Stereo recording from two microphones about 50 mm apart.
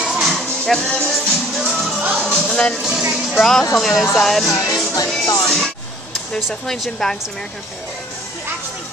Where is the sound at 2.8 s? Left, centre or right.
Centre.